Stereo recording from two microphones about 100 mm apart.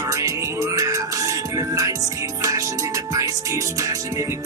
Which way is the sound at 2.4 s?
35° right (ahead or behind).